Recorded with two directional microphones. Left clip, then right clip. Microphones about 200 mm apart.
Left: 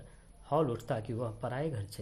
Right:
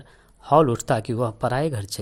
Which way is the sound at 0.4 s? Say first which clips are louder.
Right 14 dB; 35° right (ahead or behind).